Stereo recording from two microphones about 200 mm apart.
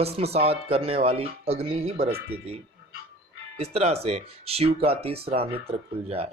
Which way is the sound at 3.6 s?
30° right (ahead or behind).